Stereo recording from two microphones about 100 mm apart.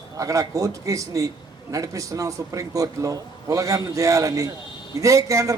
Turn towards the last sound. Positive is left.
turn(degrees=-35)  # may be behind; listen again after turning